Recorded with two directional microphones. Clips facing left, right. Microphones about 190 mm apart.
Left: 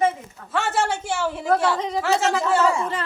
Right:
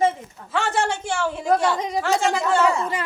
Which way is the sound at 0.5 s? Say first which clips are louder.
Even; 5° left (ahead or behind).